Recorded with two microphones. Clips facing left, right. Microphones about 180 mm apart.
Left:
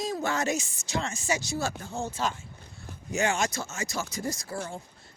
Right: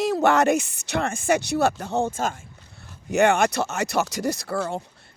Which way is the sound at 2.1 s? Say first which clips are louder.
Right 4 dB; 50° right (ahead or behind).